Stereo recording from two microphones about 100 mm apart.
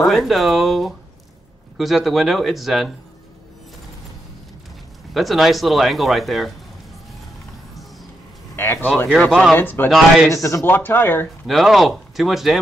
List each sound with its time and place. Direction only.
0.0 s speech: centre (ahead or behind)
5.1 s speech: centre (ahead or behind)
8.5 s speech: 20° left (ahead or behind)
9.3 s speech: centre (ahead or behind)
9.6 s speech: 20° left (ahead or behind)
9.8 s speech: centre (ahead or behind)
10.3 s speech: 30° left (ahead or behind)
11.4 s speech: centre (ahead or behind)